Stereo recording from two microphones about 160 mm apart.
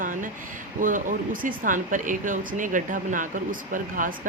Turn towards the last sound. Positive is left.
turn(degrees=-55)  # may be behind; listen again after turning